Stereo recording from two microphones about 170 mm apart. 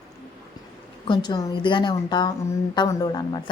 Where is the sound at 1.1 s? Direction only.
25° left (ahead or behind).